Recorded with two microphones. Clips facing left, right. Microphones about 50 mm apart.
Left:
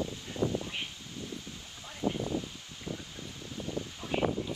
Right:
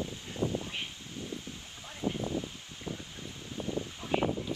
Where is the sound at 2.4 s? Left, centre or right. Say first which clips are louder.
Right 1 dB; right.